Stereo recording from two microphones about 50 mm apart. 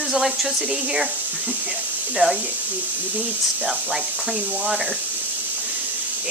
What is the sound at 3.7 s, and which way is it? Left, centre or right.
Speech, right.